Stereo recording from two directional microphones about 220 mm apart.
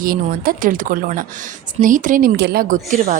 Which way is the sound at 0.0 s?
40° right (ahead or behind).